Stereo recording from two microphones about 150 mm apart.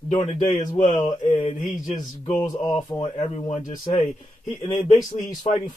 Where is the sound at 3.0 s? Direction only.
50° left (ahead or behind).